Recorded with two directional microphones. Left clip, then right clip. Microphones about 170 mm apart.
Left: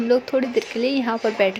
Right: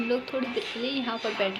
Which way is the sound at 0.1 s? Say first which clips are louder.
Left 12 dB; 45° left (ahead or behind).